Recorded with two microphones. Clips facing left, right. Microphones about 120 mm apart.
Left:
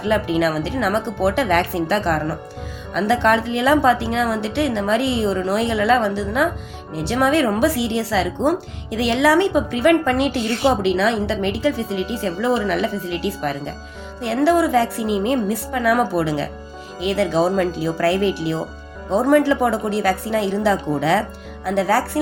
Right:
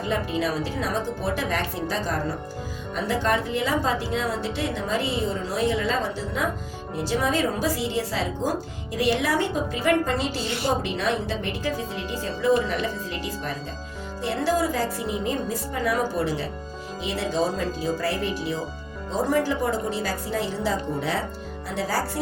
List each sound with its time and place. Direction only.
0.0 s a woman's voice: 75° left (ahead or behind)